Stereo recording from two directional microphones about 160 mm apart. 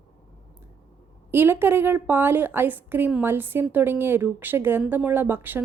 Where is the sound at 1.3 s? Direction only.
15° right (ahead or behind).